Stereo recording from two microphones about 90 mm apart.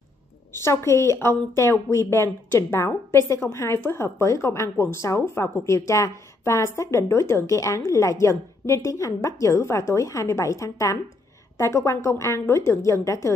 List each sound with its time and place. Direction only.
0.5 s a woman's voice: 30° left (ahead or behind)